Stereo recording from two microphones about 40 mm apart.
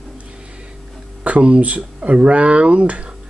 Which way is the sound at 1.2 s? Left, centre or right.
Right.